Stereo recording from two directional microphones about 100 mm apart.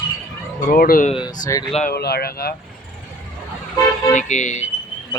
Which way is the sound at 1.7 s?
90° left.